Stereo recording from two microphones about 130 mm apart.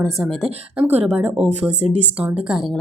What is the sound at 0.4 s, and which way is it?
Speech, 10° right (ahead or behind).